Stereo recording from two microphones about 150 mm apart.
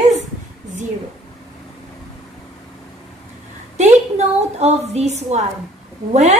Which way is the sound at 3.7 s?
50° right (ahead or behind).